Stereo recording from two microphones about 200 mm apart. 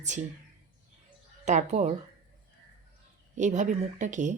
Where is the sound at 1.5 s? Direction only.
35° right (ahead or behind).